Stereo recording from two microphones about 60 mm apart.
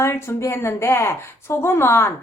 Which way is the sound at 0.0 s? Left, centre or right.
Left.